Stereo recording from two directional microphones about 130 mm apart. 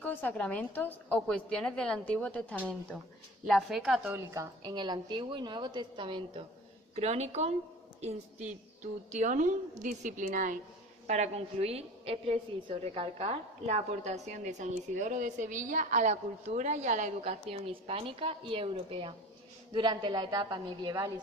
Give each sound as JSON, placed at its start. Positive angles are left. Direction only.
{"t": 0.0, "sound": "a woman's voice", "side_deg": 15}
{"t": 3.4, "sound": "a woman's voice", "side_deg": 0}
{"t": 4.1, "sound": "a woman's voice", "side_deg": -20}
{"t": 4.6, "sound": "a woman's voice", "side_deg": -35}
{"t": 6.9, "sound": "a woman's voice", "side_deg": -60}
{"t": 8.0, "sound": "a woman's voice", "side_deg": -70}
{"t": 11.0, "sound": "a woman's voice", "side_deg": -60}